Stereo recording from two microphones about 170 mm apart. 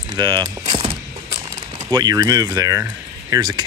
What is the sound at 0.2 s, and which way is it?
Mechanisms, 25° right (ahead or behind).